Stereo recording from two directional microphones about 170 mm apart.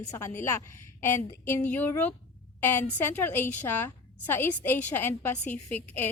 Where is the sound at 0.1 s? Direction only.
15° left (ahead or behind).